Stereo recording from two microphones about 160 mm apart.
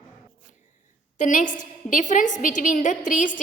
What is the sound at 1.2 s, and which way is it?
A woman's voice, 55° left (ahead or behind).